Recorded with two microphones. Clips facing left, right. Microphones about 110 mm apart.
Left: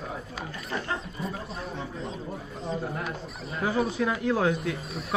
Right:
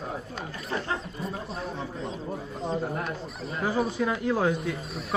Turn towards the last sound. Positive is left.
turn(degrees=0)  # may be behind; listen again after turning